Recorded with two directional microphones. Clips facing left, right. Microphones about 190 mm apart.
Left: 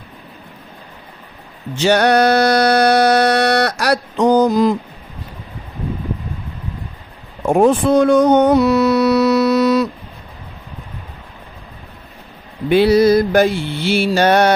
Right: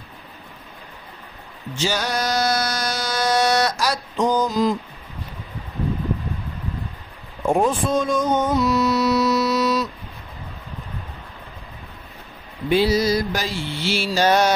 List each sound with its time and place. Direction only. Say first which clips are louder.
1.8 s a sound: left 11 dB; 65° left (ahead or behind)
7.4 s music: left 7 dB; 65° left (ahead or behind)
12.6 s mantra: left 7 dB; 60° left (ahead or behind)